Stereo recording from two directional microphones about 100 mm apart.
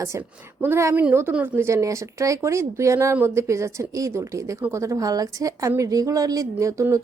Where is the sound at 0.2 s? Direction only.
25° right (ahead or behind).